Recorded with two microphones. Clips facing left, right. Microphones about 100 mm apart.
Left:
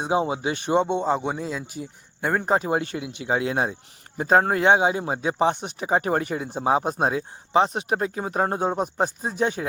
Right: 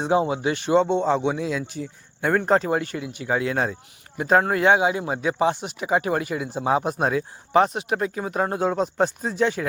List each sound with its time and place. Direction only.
0.0 s speech: 20° left (ahead or behind)
2.6 s speech: 25° left (ahead or behind)
4.2 s speech: 35° left (ahead or behind)
7.7 s speech: 35° left (ahead or behind)
8.6 s speech: 20° left (ahead or behind)